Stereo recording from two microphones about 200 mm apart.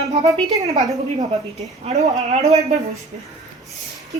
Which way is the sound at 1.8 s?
35° right (ahead or behind).